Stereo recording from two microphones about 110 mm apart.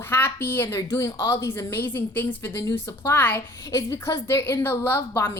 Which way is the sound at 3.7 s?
30° left (ahead or behind).